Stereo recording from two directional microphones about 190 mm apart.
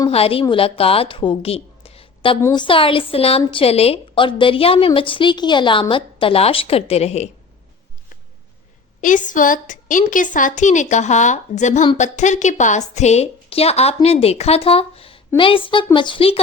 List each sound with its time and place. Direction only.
0.1 s a woman's voice: 30° left (ahead or behind)
9.0 s a woman's voice: 40° left (ahead or behind)